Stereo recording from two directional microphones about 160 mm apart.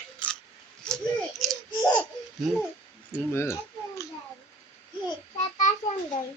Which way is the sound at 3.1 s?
15° left (ahead or behind).